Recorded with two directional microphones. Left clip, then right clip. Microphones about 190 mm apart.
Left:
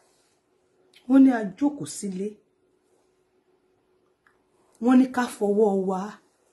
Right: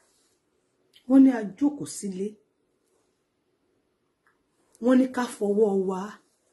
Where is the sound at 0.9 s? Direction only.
10° left (ahead or behind).